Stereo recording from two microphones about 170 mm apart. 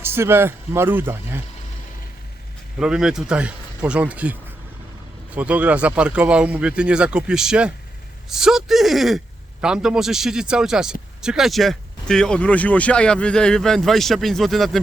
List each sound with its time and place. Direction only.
0.0 s speech: 15° right (ahead or behind)
2.7 s speech: 5° right (ahead or behind)